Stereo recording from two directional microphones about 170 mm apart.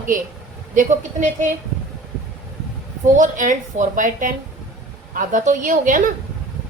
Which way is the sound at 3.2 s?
50° right (ahead or behind).